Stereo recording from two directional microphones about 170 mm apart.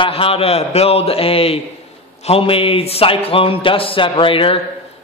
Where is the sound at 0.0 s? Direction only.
35° left (ahead or behind).